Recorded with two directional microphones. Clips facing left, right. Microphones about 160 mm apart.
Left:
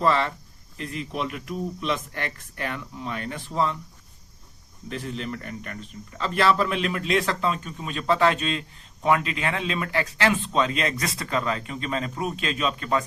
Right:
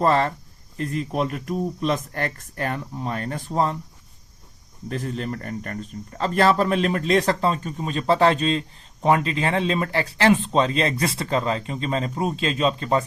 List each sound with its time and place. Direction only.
0.0 s speech: 40° right (ahead or behind)
4.9 s speech: 45° right (ahead or behind)